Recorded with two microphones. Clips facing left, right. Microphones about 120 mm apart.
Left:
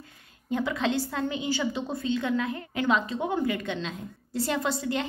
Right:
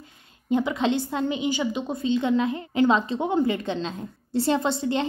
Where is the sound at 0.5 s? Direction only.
20° right (ahead or behind).